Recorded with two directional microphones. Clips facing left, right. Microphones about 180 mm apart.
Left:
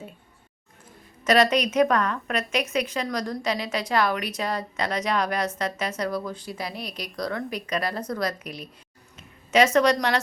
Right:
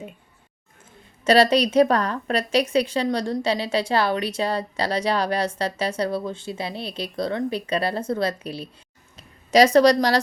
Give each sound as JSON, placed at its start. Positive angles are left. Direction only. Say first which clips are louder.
{"t": 1.2, "sound": "a woman's voice", "louder": "right 3 dB", "side_deg": -30}